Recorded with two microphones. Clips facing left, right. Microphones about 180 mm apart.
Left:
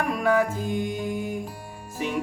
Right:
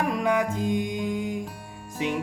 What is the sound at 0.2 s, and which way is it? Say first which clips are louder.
Music: left 2 dB; 20° right (ahead or behind).